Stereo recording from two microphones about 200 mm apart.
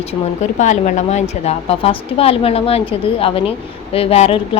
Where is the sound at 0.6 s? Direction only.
35° left (ahead or behind).